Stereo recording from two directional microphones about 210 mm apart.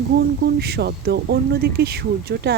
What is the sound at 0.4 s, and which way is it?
Speech, 50° right (ahead or behind).